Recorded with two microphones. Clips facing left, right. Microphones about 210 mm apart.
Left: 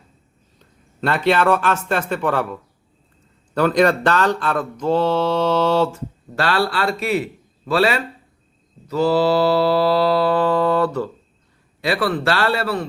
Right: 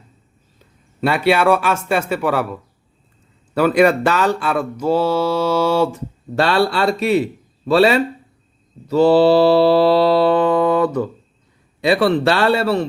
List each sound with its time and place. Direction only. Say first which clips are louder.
1.0 s speech: right 2 dB; 10° right (ahead or behind)
6.4 s mantra: right 4 dB; 25° right (ahead or behind)